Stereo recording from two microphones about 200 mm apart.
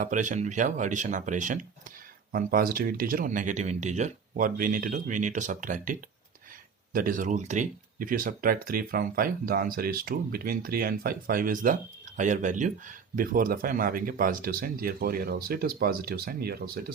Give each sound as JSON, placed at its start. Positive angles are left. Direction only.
{"t": 0.0, "sound": "speech", "side_deg": -40}